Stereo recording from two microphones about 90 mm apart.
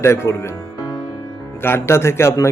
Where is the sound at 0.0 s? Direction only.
30° left (ahead or behind).